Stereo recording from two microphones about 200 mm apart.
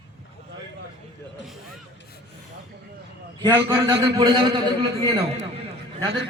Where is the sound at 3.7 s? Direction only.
20° right (ahead or behind).